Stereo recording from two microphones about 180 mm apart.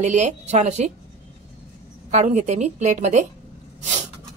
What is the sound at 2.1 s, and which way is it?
Speech, 40° right (ahead or behind).